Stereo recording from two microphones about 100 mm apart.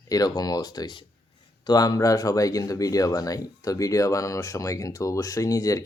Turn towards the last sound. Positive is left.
turn(degrees=35)  # may be behind; listen again after turning